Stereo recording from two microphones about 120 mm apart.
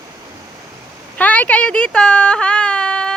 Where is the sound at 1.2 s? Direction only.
10° left (ahead or behind).